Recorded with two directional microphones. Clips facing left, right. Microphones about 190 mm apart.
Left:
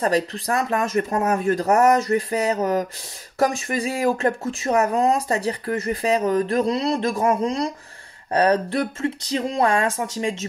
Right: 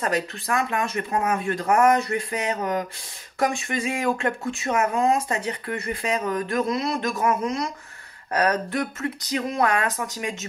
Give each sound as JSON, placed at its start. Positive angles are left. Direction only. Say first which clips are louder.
{"t": 0.0, "sound": "speech", "louder": "left 5 dB", "side_deg": 35}